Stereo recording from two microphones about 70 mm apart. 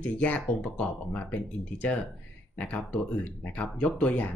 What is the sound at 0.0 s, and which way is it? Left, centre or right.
Speech, centre.